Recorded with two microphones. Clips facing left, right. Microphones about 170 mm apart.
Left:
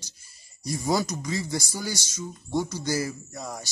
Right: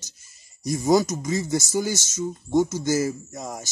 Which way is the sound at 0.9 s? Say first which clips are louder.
Right 7 dB; 20° right (ahead or behind).